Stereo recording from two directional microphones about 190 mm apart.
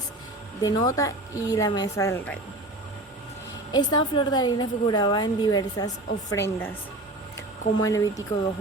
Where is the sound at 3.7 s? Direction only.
20° left (ahead or behind).